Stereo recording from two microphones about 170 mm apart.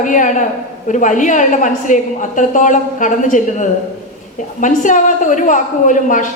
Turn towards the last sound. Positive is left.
turn(degrees=50)  # may be behind; listen again after turning